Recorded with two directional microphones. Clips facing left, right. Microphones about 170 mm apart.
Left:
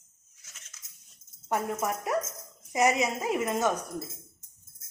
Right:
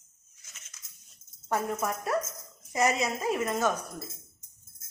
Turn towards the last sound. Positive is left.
turn(degrees=20)  # may be behind; listen again after turning